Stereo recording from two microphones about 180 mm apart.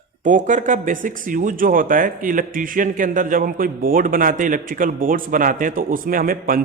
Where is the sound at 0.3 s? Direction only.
45° right (ahead or behind).